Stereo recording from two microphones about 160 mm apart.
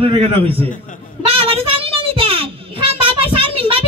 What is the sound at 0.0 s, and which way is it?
Speech, 35° right (ahead or behind).